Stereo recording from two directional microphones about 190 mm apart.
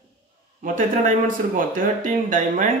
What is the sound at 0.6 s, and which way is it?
Speech, 45° right (ahead or behind).